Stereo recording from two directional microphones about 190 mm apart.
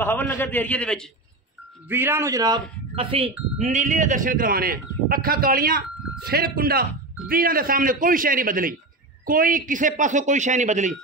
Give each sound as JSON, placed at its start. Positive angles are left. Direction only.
{"t": 0.0, "sound": "a man's voice", "side_deg": 10}
{"t": 1.9, "sound": "a man's voice", "side_deg": -10}